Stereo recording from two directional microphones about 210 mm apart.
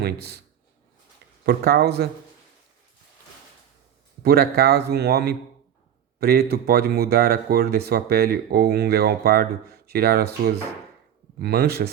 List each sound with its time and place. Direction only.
0.0 s speech: 50° right (ahead or behind)
1.5 s speech: 45° right (ahead or behind)
4.2 s speech: 45° right (ahead or behind)